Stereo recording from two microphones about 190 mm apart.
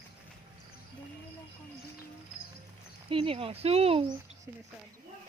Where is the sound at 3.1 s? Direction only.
30° right (ahead or behind).